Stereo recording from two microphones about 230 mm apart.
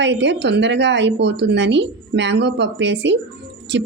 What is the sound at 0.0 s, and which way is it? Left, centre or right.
Speech, right.